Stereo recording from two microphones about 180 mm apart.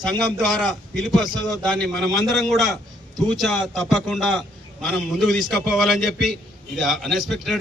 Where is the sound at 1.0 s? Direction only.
Centre (ahead or behind).